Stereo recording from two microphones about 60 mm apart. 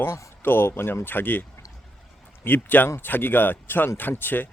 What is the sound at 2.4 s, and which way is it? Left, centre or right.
Speech, left.